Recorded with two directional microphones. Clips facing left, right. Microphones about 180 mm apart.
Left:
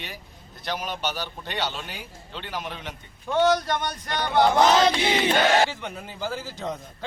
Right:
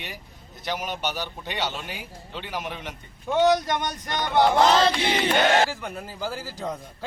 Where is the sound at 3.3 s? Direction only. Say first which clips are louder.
Right 1 dB; 20° right (ahead or behind).